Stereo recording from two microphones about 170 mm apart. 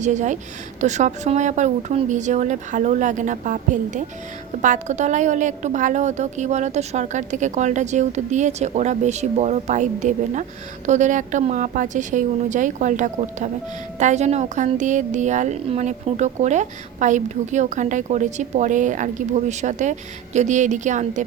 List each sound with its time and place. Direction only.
0.0 s a woman's voice: 45° right (ahead or behind)